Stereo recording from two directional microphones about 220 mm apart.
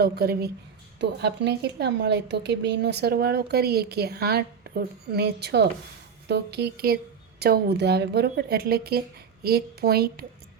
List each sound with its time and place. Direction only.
0.0 s a woman's voice: 45° right (ahead or behind)